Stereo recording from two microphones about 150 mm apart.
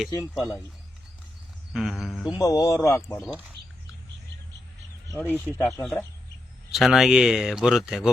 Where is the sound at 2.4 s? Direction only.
20° left (ahead or behind).